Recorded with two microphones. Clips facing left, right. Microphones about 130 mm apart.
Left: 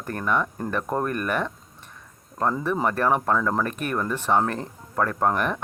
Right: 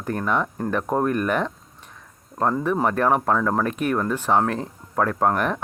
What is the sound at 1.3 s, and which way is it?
Speech, 15° right (ahead or behind).